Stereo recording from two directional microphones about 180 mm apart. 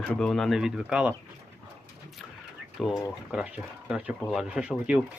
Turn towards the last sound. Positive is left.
turn(degrees=-5)  # may be behind; listen again after turning